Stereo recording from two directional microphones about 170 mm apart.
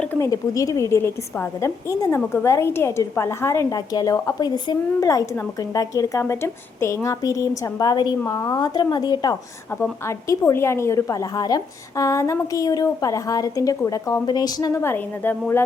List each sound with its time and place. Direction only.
0.0 s a woman's voice: 15° left (ahead or behind)